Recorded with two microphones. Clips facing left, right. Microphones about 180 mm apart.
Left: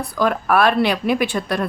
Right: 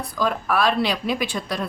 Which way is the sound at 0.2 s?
60° left (ahead or behind).